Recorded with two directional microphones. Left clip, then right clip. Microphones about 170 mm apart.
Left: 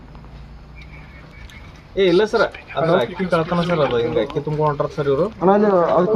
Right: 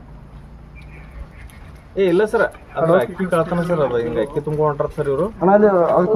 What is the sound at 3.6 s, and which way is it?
Speech, 55° left (ahead or behind).